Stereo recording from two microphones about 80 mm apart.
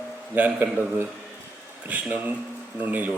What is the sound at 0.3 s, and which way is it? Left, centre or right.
A man's voice, right.